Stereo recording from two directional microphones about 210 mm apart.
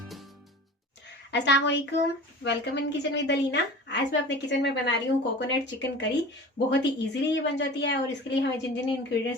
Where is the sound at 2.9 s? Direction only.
55° left (ahead or behind).